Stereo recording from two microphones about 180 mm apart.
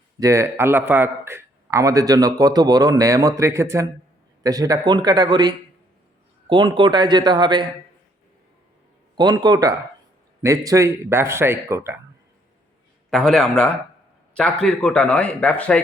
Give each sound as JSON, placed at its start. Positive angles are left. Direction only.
{"t": 0.2, "sound": "a man's voice", "side_deg": -15}
{"t": 9.1, "sound": "a man's voice", "side_deg": -25}
{"t": 13.1, "sound": "a man's voice", "side_deg": 0}